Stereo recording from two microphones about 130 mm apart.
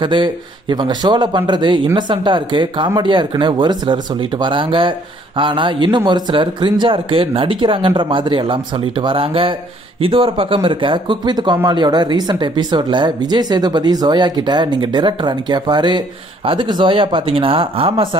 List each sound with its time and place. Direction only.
0.0 s speech: 35° right (ahead or behind)